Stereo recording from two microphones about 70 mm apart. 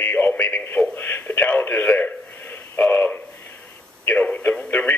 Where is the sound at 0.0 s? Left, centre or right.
Left.